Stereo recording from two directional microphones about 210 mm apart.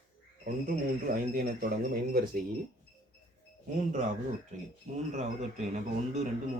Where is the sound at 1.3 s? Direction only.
45° right (ahead or behind).